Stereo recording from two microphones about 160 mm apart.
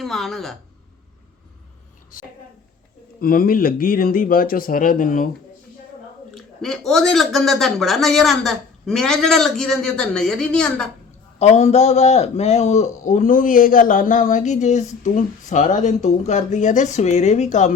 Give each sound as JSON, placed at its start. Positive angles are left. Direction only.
{"t": 0.0, "sound": "speech", "side_deg": 0}
{"t": 2.1, "sound": "speech", "side_deg": 60}
{"t": 6.3, "sound": "speech", "side_deg": 0}
{"t": 11.3, "sound": "a man's voice", "side_deg": 45}